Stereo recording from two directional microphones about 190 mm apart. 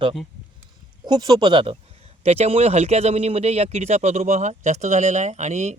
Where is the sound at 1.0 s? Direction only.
20° right (ahead or behind).